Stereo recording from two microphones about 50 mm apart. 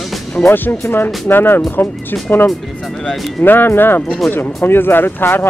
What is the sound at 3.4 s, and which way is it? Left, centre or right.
Speech, left.